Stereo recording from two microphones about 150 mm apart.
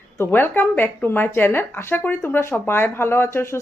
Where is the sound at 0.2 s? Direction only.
15° left (ahead or behind).